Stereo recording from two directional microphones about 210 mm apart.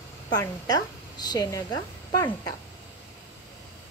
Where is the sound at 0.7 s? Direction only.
20° left (ahead or behind).